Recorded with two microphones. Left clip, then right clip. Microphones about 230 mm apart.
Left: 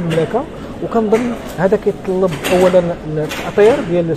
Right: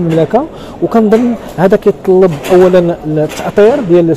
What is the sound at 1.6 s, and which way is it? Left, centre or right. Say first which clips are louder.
Speech: right 6 dB; right.